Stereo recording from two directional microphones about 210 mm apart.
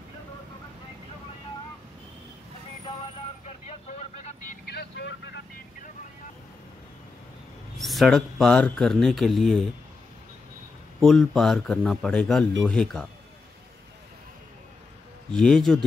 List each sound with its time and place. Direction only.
3.4 s vehicle: 30° left (ahead or behind)
4.6 s vehicle: 50° left (ahead or behind)
7.7 s speech: centre (ahead or behind)
11.0 s speech: centre (ahead or behind)
15.3 s speech: 5° left (ahead or behind)